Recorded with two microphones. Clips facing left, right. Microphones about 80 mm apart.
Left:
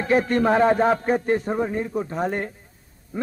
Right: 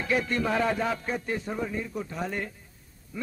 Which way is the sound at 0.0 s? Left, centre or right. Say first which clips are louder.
Left 8 dB; left.